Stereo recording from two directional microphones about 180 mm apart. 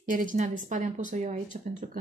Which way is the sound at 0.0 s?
45° right (ahead or behind).